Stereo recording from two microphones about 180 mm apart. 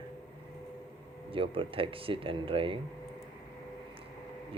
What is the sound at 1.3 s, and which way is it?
Speech, 30° right (ahead or behind).